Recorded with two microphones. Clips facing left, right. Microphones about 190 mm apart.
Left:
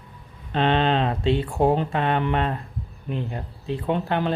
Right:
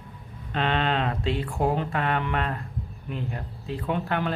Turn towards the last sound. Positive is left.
turn(degrees=25)  # may be behind; listen again after turning